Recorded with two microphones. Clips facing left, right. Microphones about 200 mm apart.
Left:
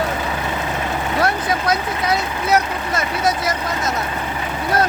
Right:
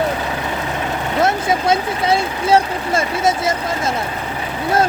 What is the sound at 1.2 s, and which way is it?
Speech, 25° right (ahead or behind).